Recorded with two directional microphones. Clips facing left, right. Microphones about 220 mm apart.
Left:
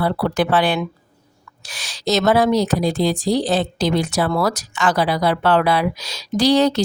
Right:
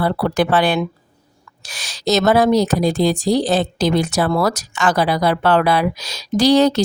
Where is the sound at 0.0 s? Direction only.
45° right (ahead or behind).